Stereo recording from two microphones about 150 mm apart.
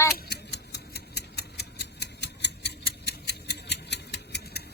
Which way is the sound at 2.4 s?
90° left.